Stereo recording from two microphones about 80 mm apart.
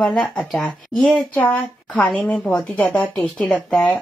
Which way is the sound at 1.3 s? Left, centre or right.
Centre.